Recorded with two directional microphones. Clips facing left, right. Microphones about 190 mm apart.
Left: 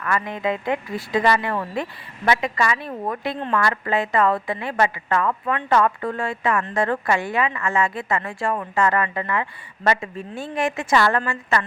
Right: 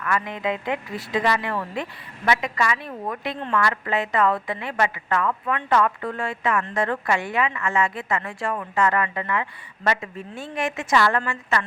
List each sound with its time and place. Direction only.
0.0 s a woman's voice: 40° left (ahead or behind)